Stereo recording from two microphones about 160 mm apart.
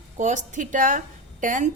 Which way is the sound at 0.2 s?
50° right (ahead or behind).